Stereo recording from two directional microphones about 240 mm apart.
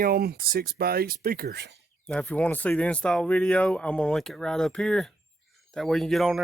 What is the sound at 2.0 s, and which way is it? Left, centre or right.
Speech, centre.